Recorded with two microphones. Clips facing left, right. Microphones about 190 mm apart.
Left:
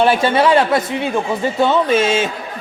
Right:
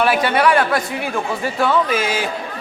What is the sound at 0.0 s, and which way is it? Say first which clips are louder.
Speech: left 2 dB; 25° left (ahead or behind).